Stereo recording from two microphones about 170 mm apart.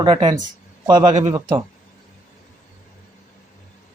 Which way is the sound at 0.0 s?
25° right (ahead or behind).